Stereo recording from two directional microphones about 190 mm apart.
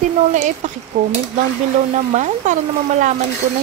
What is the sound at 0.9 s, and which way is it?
Speech, 40° right (ahead or behind).